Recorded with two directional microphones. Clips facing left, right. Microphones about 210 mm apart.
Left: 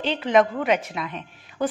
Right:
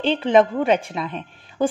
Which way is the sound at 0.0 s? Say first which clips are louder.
Right 3 dB; 30° right (ahead or behind).